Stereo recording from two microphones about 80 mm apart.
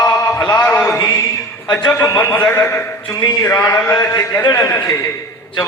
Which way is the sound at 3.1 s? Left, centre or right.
Left.